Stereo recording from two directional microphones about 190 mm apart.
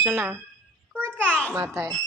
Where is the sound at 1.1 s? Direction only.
10° left (ahead or behind).